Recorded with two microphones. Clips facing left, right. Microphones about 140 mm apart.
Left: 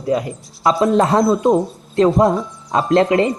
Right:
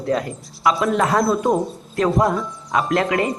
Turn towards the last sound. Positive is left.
turn(degrees=25)  # may be behind; listen again after turning